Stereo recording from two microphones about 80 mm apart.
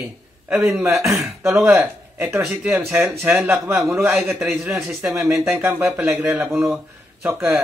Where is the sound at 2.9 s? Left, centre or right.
Right.